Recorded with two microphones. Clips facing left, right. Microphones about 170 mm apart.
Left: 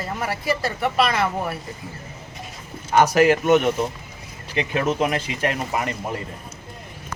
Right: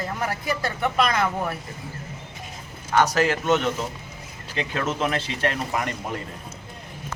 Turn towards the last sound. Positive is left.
turn(degrees=10)  # may be behind; listen again after turning